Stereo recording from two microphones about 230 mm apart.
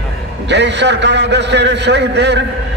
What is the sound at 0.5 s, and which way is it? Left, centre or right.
A man's voice, right.